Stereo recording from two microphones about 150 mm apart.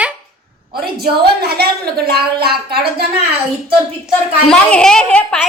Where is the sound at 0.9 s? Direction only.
90° right.